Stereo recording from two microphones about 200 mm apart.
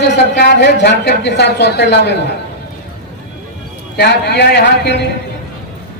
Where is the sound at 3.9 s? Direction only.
55° left (ahead or behind).